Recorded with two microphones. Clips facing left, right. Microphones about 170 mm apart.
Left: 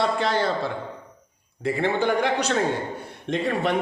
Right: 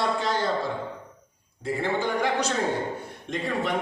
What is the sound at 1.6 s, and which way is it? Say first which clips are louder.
A man's voice: left 4 dB; 70° left (ahead or behind).